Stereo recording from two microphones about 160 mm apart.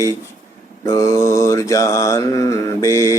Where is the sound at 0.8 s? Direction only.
20° left (ahead or behind).